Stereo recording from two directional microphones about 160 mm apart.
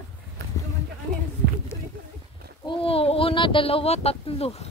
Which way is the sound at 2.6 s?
35° left (ahead or behind).